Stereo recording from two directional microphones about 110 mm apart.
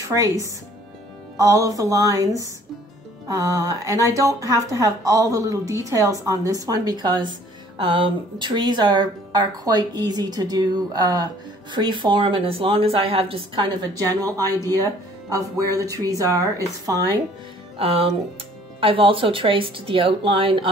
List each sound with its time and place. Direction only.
0.0 s speech: 30° right (ahead or behind)
7.8 s a woman's voice: 50° right (ahead or behind)
13.6 s speech: 35° right (ahead or behind)
17.7 s a woman's voice: 60° right (ahead or behind)